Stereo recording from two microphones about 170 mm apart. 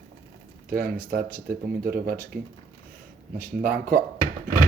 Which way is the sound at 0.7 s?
60° right (ahead or behind).